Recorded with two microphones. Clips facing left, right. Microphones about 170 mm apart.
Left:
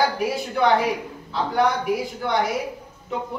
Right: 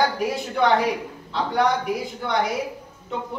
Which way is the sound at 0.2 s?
Centre (ahead or behind).